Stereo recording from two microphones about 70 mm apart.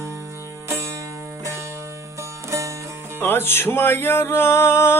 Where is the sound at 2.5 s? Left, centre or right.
Right.